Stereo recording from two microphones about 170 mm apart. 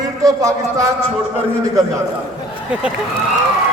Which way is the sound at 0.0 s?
20° right (ahead or behind).